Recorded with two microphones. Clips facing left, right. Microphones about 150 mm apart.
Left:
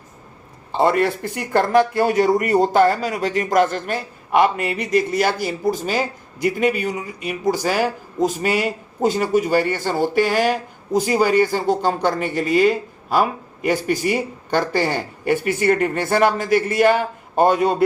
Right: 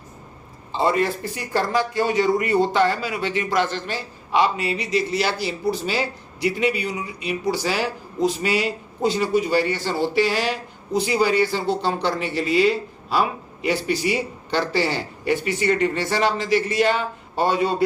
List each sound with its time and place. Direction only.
0.7 s speech: 60° left (ahead or behind)